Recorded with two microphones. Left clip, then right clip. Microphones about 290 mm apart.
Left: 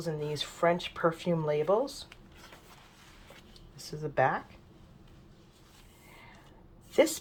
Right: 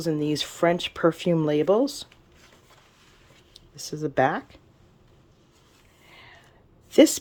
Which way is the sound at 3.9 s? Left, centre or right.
Right.